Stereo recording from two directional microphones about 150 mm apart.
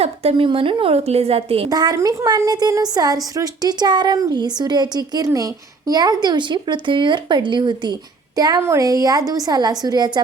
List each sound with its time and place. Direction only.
0.0 s a woman's voice: 40° right (ahead or behind)
1.7 s a woman's voice: 25° right (ahead or behind)